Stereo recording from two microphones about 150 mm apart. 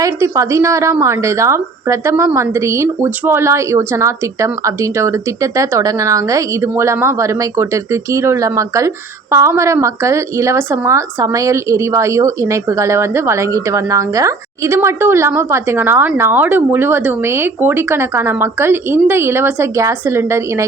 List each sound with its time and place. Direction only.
0.0 s a woman's voice: 20° right (ahead or behind)